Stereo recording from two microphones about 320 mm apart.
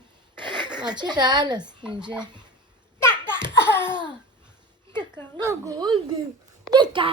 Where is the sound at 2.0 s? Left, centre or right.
Centre.